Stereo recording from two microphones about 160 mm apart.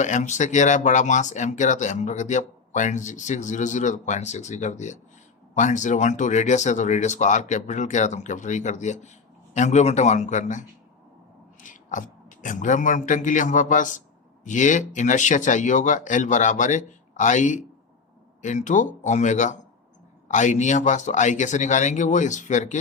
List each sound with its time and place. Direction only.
0.0 s speech: 50° left (ahead or behind)